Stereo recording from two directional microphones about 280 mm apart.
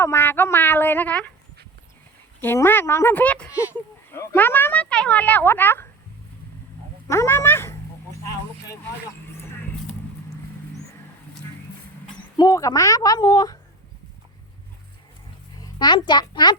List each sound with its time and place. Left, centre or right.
0.0 s speech: centre
2.4 s speech: centre
7.1 s speech: centre
12.4 s speech: centre
15.6 s a child's voice: centre